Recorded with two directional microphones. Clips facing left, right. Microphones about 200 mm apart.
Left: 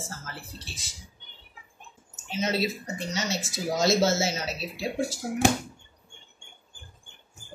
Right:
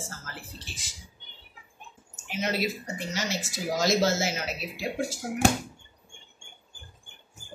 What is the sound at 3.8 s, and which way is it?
Speech, 25° left (ahead or behind).